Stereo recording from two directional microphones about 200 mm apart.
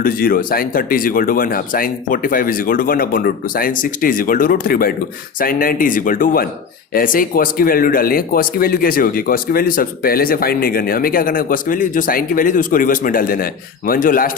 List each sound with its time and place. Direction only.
0.0 s speech: 45° left (ahead or behind)